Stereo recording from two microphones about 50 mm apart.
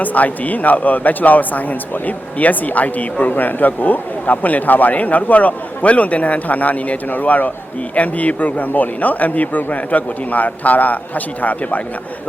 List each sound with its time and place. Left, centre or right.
0.0 s speech: left